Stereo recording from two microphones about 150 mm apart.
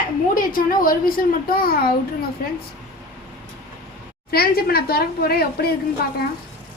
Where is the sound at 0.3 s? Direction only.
70° left (ahead or behind); by 1.9 s 85° left.